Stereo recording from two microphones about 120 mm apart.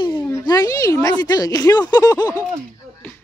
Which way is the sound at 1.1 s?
35° left (ahead or behind).